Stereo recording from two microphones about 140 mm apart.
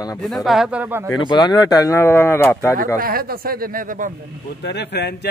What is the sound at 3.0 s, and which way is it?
Speech, 90° right.